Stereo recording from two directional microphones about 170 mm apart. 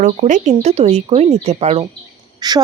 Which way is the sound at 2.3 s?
25° right (ahead or behind).